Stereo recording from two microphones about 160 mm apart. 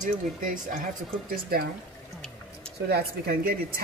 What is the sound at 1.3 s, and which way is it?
Speech, 70° right (ahead or behind).